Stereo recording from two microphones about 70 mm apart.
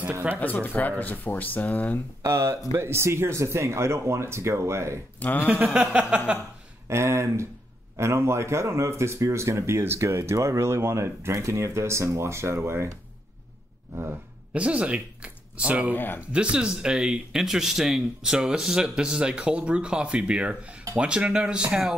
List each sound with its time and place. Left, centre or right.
0.4 s speech: left
2.2 s speech: right
5.2 s speech: left
5.5 s speech: right
6.9 s speech: right
14.5 s speech: centre
15.9 s speech: left
16.2 s speech: centre